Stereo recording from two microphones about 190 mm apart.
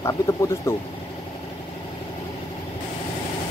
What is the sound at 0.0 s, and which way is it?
Speech, 20° left (ahead or behind).